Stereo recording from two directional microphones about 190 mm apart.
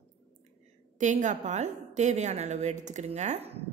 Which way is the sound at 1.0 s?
40° right (ahead or behind).